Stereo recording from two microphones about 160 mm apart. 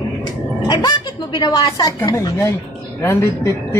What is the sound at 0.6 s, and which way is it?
A woman's voice, 25° left (ahead or behind).